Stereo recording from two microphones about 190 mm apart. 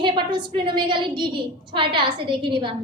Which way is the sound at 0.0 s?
25° right (ahead or behind).